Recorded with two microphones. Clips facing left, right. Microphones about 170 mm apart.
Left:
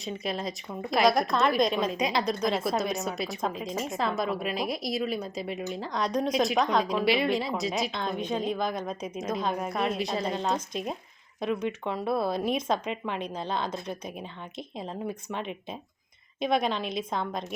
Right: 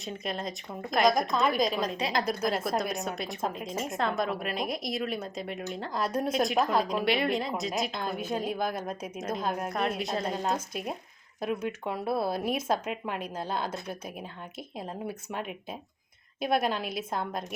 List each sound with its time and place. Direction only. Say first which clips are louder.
0.0 s a woman's voice: left 2 dB; centre (ahead or behind)